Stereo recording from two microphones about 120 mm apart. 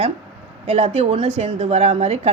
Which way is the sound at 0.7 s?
60° right (ahead or behind).